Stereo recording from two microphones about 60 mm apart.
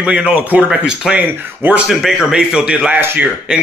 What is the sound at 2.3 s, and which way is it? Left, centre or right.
Speech, centre.